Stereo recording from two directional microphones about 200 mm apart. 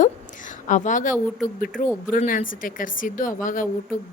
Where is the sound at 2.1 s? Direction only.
40° left (ahead or behind).